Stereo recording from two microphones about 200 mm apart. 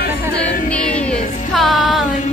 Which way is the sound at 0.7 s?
5° left (ahead or behind).